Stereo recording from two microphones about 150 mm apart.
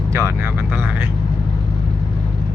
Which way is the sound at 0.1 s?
20° right (ahead or behind).